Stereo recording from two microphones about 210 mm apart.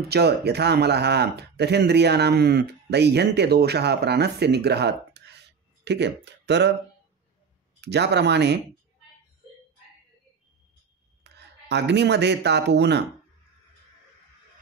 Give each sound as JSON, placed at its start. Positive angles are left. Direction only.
{"t": 0.1, "sound": "speech", "side_deg": -50}
{"t": 7.8, "sound": "speech", "side_deg": -55}
{"t": 11.3, "sound": "speech", "side_deg": -55}